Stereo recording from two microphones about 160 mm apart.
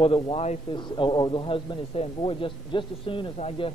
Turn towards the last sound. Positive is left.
turn(degrees=35)  # may be behind; listen again after turning